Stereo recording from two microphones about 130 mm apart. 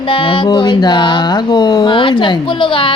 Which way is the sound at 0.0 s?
40° left (ahead or behind).